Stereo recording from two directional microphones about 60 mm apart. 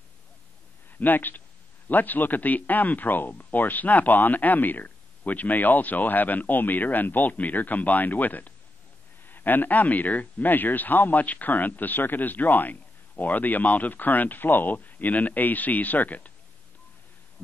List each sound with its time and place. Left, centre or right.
0.8 s a man's voice: left